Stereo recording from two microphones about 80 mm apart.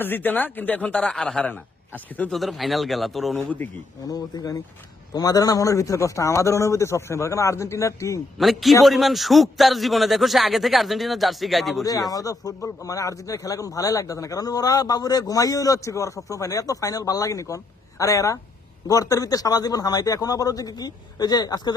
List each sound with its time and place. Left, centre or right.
0.0 s speech: left; by 1.5 s centre
1.5 s a man's voice: centre
2.3 s a man's voice: centre
3.3 s speech: left
4.1 s a man's voice: left
8.4 s a man's voice: centre
12.1 s speech: left